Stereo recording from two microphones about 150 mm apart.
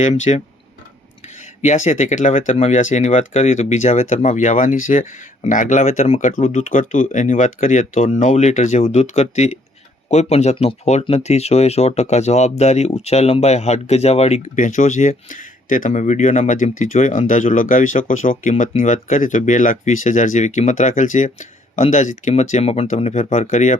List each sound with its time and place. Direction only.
0.0 s speech: 50° left (ahead or behind)
1.6 s speech: 50° left (ahead or behind)